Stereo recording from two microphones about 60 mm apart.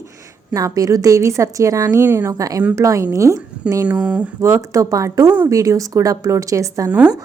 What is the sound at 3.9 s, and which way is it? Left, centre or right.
Speech, right.